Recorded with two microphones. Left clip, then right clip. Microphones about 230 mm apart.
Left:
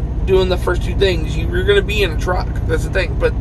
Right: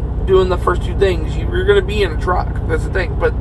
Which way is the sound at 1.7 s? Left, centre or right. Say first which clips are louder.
Right 1 dB; centre.